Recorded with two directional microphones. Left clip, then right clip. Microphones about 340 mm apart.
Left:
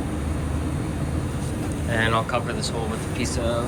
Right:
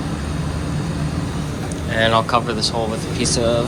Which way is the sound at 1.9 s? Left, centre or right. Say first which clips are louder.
Right 7 dB; centre.